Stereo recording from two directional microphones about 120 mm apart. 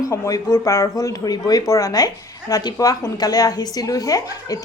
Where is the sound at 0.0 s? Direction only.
30° left (ahead or behind).